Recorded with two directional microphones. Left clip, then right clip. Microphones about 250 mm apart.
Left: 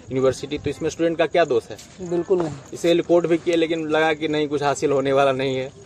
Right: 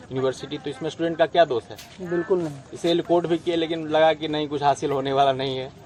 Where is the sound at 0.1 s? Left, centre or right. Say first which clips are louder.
Left 5 dB; left.